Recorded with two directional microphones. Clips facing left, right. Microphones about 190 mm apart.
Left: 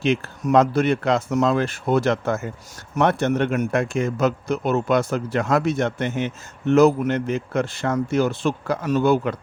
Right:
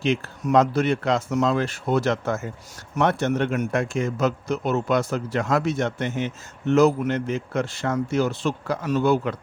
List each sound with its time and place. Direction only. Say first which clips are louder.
0.0 s a man's voice: left 2 dB; 60° left (ahead or behind)